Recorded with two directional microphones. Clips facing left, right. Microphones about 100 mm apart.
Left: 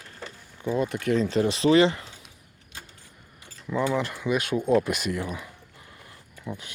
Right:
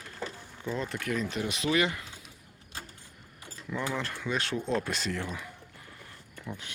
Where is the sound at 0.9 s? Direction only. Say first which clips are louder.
Left 9 dB; 30° left (ahead or behind).